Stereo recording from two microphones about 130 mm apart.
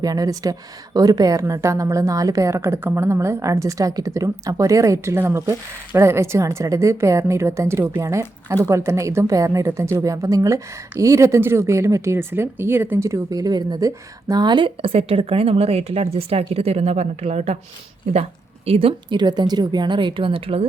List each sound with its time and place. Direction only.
0.0 s a woman's voice: 30° right (ahead or behind); by 20.7 s 45° right (ahead or behind)